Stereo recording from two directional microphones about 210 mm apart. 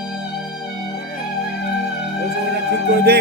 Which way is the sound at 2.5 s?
50° right (ahead or behind).